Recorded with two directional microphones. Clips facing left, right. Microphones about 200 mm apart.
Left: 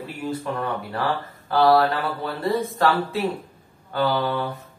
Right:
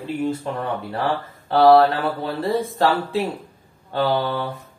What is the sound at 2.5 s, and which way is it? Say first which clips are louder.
Speech: right 1 dB; 30° right (ahead or behind).